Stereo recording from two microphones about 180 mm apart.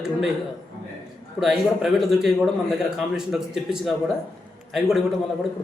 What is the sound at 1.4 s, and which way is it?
A man's voice, centre (ahead or behind).